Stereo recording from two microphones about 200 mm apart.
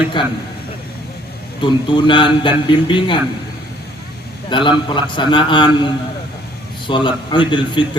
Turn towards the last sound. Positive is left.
turn(degrees=25)  # may be behind; listen again after turning